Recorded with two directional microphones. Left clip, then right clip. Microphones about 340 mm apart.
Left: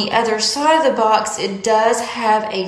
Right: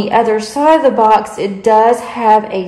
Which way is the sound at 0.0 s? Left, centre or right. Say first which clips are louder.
Right 4 dB; centre.